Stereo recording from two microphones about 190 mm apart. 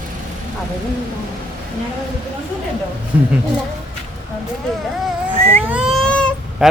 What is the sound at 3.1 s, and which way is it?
Speech, 5° right (ahead or behind).